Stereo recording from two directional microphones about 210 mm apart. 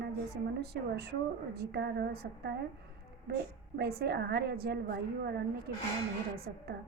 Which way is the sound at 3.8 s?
50° right (ahead or behind).